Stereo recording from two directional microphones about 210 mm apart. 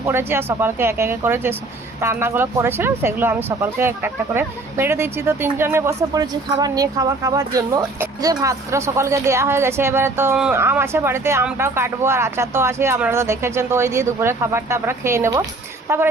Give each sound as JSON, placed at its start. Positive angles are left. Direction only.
{"t": 0.0, "sound": "speech", "side_deg": -10}